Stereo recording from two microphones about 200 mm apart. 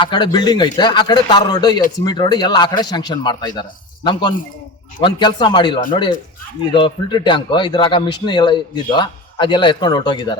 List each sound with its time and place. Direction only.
0.0 s a man's voice: 20° left (ahead or behind)